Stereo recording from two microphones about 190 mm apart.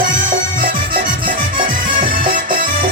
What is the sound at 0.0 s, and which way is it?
Music, 45° right (ahead or behind).